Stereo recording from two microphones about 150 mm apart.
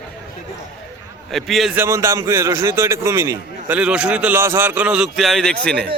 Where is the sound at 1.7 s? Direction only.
15° right (ahead or behind); by 5.9 s 5° left (ahead or behind).